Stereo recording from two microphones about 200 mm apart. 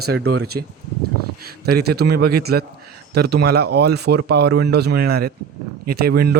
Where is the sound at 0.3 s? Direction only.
55° right (ahead or behind).